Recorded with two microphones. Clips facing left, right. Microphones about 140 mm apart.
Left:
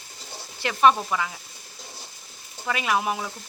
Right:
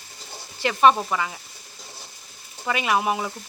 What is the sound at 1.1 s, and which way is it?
Speech, centre (ahead or behind).